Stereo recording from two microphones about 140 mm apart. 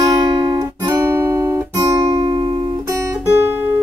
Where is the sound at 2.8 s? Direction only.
20° right (ahead or behind).